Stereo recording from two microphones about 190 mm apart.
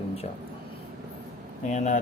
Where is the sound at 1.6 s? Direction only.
40° left (ahead or behind).